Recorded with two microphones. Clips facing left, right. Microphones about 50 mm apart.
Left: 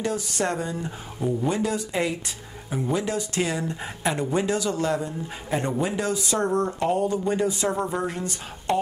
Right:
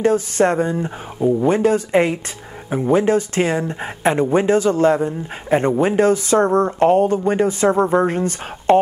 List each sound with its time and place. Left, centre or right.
0.0 s speech: right
1.5 s speech: right